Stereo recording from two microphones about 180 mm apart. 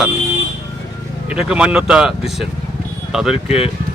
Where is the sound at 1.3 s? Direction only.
5° right (ahead or behind).